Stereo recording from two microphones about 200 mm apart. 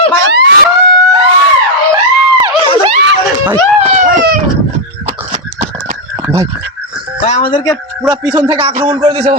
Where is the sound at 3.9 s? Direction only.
40° right (ahead or behind).